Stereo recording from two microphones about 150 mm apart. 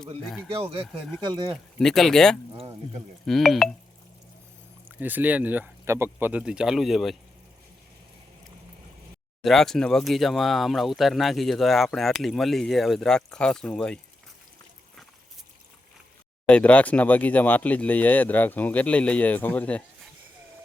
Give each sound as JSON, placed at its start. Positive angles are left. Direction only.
{"t": 0.5, "sound": "speech", "side_deg": -40}
{"t": 1.5, "sound": "speech", "side_deg": 0}
{"t": 4.9, "sound": "speech", "side_deg": -10}
{"t": 9.4, "sound": "speech", "side_deg": 0}
{"t": 16.5, "sound": "speech", "side_deg": 10}